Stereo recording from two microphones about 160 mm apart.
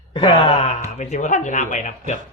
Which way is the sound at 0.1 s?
35° left (ahead or behind).